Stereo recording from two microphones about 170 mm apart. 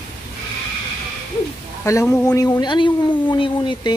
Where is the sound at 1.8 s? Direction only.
20° left (ahead or behind).